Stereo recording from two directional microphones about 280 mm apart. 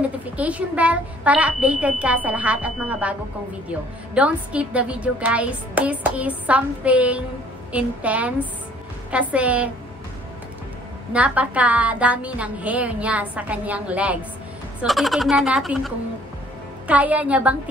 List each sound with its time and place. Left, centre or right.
0.4 s a woman's voice: centre
11.1 s a woman's voice: centre